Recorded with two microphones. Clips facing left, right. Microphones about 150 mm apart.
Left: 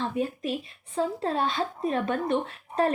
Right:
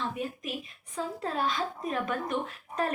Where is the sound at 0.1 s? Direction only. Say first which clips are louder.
Left 6 dB; 30° left (ahead or behind).